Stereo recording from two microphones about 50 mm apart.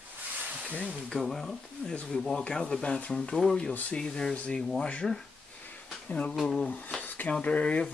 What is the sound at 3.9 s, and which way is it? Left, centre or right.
Speech, centre.